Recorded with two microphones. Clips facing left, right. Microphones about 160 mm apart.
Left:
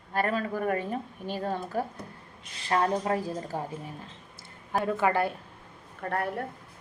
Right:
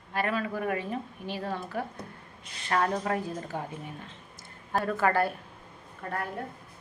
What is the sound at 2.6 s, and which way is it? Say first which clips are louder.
Speech: left 2 dB; 25° left (ahead or behind).